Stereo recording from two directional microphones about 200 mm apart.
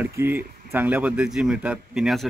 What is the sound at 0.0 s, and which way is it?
Speech, 10° right (ahead or behind).